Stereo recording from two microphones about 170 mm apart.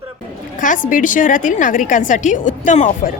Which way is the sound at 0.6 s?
50° left (ahead or behind).